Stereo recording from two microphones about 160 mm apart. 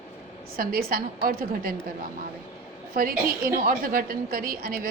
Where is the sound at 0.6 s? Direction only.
65° right (ahead or behind).